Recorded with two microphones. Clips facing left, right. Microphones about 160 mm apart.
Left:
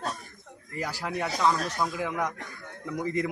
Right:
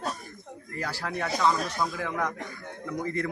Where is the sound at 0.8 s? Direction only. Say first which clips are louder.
Left 1 dB; 15° left (ahead or behind).